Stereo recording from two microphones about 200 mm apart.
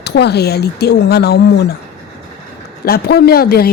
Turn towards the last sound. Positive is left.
turn(degrees=50)  # may be behind; listen again after turning